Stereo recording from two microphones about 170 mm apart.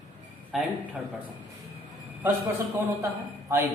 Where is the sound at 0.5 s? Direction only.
Centre (ahead or behind).